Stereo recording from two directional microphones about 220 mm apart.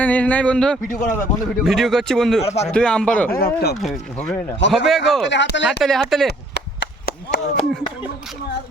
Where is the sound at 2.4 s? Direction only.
30° left (ahead or behind).